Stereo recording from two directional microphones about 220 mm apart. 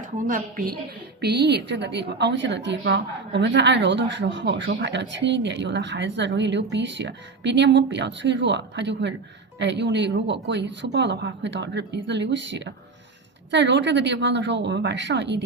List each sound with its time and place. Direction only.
0.3 s a woman's voice: 35° right (ahead or behind)
1.2 s a woman's voice: 50° right (ahead or behind)